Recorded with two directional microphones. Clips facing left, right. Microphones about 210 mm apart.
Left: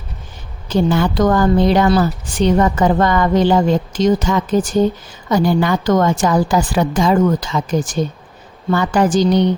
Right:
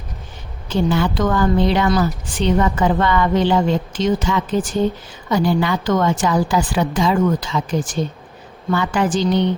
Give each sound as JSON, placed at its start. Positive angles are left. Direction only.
{"t": 0.7, "sound": "a woman's voice", "side_deg": 45}